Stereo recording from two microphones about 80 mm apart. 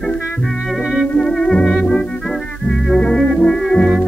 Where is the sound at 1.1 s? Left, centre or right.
Centre.